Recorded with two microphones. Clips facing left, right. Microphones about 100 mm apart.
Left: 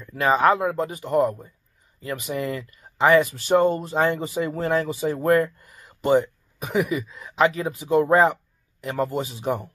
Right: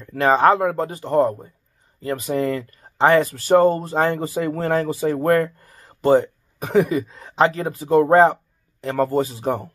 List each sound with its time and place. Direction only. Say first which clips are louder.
0.2 s speech: right 3 dB; 35° right (ahead or behind)